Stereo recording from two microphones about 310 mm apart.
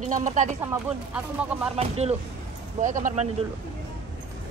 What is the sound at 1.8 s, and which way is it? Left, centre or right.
A woman's voice, centre.